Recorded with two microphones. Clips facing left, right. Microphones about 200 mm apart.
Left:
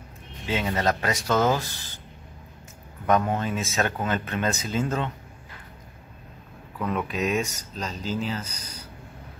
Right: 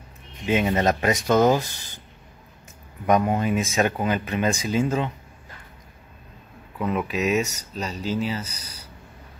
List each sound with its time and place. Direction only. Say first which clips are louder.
0.5 s speech: right 4 dB; 20° right (ahead or behind)
3.1 s speech: right 3 dB; 10° right (ahead or behind)
6.8 s speech: right 2 dB; 10° right (ahead or behind)